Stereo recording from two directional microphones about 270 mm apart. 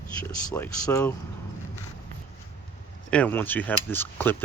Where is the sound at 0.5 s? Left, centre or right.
Centre.